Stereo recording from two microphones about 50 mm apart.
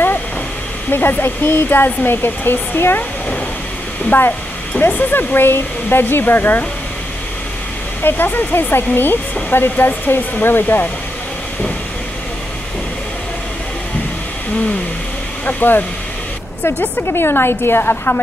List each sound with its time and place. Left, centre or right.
0.8 s speech: left
4.1 s speech: left
8.0 s speech: left
15.4 s speech: left
17.1 s speech: left